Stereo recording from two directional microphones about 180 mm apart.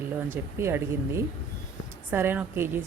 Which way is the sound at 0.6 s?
15° right (ahead or behind).